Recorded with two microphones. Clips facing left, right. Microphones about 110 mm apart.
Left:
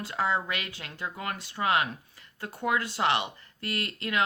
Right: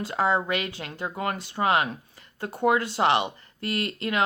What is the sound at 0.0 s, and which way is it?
Speech, 30° right (ahead or behind).